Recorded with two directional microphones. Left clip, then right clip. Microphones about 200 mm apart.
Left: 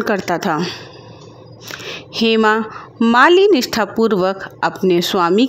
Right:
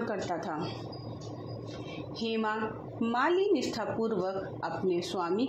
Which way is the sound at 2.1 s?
50° left (ahead or behind).